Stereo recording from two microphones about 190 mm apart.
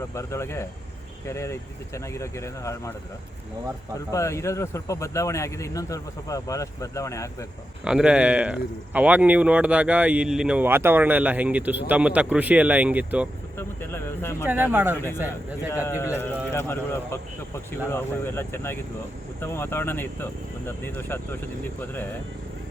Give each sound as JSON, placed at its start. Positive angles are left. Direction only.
{"t": 0.1, "sound": "speech", "side_deg": 15}
{"t": 3.9, "sound": "speech", "side_deg": 15}
{"t": 7.9, "sound": "speech", "side_deg": -5}
{"t": 13.6, "sound": "speech", "side_deg": 10}
{"t": 14.4, "sound": "speech", "side_deg": -10}
{"t": 15.7, "sound": "speech", "side_deg": 15}